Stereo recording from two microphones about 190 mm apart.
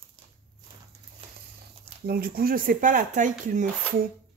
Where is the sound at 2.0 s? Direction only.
55° right (ahead or behind).